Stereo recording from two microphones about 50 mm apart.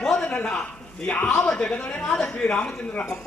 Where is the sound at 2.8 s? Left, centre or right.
Left.